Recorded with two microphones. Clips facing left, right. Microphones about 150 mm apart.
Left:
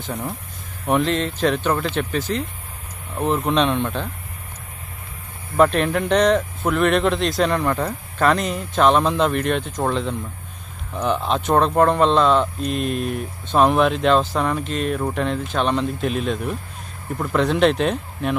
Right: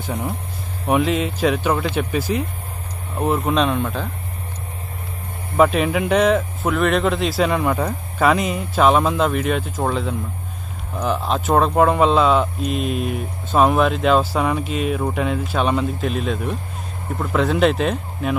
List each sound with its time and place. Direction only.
0.8 s speech: 10° right (ahead or behind)
5.6 s speech: 5° right (ahead or behind)